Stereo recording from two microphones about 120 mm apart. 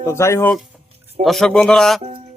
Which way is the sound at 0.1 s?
20° left (ahead or behind).